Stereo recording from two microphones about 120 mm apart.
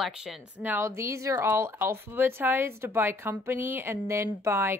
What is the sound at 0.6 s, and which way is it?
Speech, 15° right (ahead or behind).